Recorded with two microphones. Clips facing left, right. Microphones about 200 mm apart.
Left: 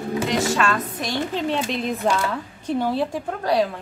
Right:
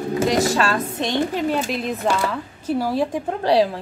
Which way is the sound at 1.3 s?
5° right (ahead or behind).